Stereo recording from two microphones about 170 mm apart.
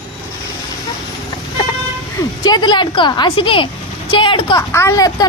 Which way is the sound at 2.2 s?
25° left (ahead or behind).